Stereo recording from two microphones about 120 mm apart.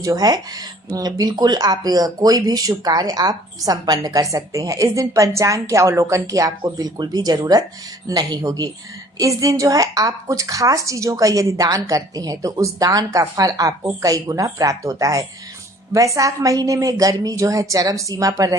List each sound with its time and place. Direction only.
0.0 s a woman's voice: 30° right (ahead or behind)